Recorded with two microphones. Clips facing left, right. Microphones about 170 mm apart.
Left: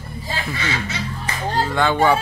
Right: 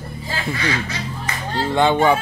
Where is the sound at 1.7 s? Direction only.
20° right (ahead or behind).